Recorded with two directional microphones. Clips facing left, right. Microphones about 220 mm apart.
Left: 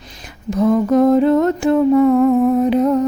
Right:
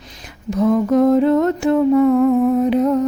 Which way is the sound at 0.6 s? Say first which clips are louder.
Left 1 dB; 35° left (ahead or behind).